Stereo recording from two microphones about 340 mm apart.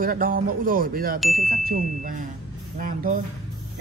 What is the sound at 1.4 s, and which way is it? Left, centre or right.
Speech, right.